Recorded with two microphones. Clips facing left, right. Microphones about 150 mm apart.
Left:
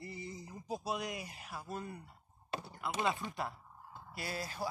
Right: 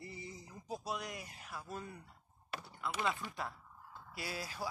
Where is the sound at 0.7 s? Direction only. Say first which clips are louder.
Left 3 dB; 5° left (ahead or behind).